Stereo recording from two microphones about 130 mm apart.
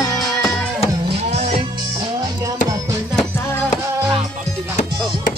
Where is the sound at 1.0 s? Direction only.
50° right (ahead or behind).